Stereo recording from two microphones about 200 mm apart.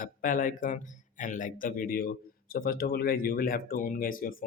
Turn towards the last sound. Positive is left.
turn(degrees=45)  # may be behind; listen again after turning